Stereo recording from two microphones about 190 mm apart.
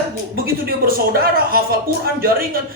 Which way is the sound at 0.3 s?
50° right (ahead or behind).